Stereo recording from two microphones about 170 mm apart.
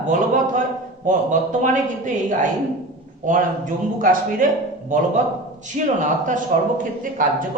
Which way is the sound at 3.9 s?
55° right (ahead or behind).